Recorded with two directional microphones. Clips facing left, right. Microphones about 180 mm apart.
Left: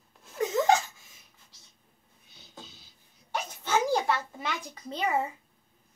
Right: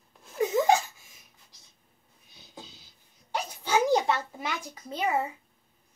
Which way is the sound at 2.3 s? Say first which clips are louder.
Right 2 dB; 15° right (ahead or behind).